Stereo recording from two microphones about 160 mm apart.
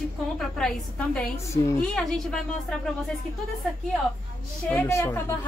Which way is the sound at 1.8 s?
Centre (ahead or behind).